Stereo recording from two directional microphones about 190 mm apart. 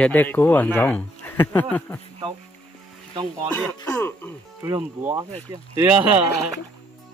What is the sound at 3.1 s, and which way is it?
Speech, 25° right (ahead or behind).